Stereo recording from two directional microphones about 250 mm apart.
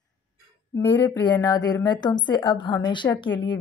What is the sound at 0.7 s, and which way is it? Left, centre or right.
A woman's voice, centre.